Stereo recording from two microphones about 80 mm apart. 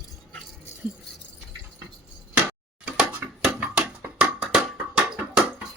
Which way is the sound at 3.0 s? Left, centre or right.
Centre.